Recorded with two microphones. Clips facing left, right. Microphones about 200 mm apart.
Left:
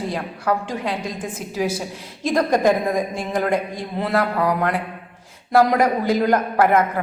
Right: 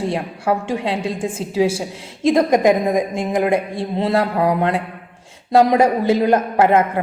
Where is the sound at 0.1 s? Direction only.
25° right (ahead or behind).